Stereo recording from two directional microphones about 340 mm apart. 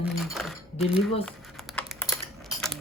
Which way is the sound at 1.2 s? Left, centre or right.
Centre.